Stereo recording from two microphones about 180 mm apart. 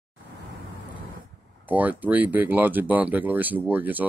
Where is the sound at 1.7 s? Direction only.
10° right (ahead or behind).